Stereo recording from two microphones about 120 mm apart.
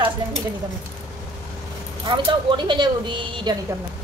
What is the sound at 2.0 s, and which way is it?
Speech, 40° right (ahead or behind).